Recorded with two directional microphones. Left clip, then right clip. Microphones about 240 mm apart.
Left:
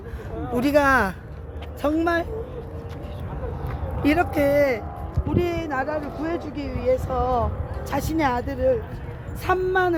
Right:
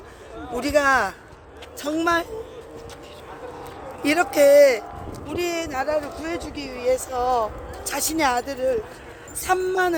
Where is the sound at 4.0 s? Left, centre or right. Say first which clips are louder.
Right 3 dB; right.